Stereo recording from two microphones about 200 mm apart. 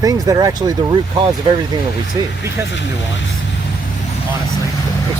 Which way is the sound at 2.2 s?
20° right (ahead or behind).